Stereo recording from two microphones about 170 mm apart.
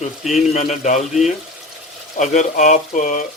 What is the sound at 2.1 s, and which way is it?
Speech, 45° left (ahead or behind).